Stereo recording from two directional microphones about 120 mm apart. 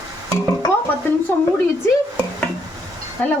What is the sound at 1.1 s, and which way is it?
Speech, 20° left (ahead or behind).